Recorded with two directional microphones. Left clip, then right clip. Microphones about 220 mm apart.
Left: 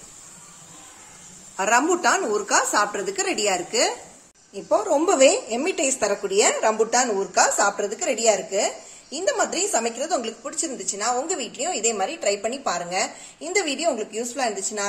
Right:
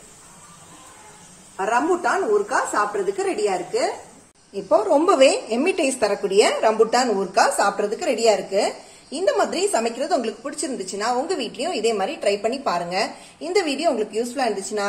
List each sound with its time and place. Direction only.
1.6 s a woman's voice: 50° left (ahead or behind)
4.6 s a woman's voice: centre (ahead or behind)